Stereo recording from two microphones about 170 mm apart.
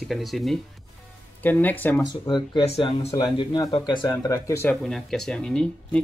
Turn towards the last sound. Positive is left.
turn(degrees=5)  # may be behind; listen again after turning